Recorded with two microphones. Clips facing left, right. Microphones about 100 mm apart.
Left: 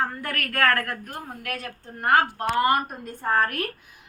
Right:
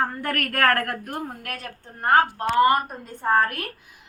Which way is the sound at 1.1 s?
40° right (ahead or behind).